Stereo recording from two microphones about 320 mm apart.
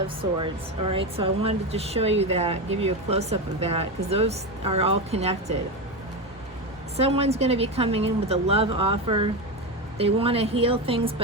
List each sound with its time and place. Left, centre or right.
0.3 s speech: centre
6.9 s speech: centre